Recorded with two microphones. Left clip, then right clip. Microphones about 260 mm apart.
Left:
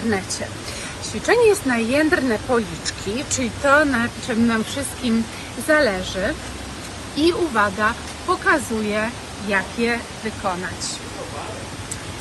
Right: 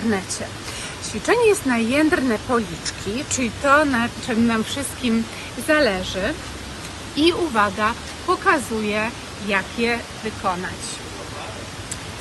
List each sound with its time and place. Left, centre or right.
0.1 s speech: centre
3.6 s speech: centre